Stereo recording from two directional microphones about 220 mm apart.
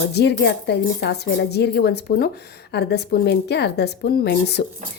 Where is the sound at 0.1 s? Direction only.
50° left (ahead or behind).